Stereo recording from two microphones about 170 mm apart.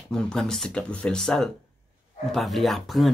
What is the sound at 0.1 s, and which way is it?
Speech, 5° left (ahead or behind).